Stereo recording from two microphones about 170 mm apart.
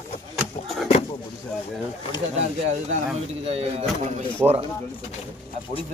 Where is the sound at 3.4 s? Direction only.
35° right (ahead or behind).